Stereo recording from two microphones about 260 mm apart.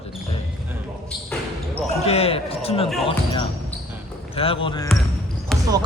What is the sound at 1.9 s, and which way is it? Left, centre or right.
Speech, left.